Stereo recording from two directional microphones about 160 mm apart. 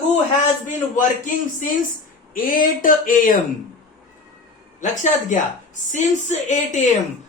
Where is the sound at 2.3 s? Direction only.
60° left (ahead or behind).